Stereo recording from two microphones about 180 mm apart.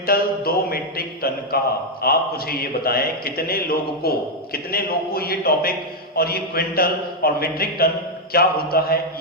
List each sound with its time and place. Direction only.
0.0 s a man's voice: 60° left (ahead or behind)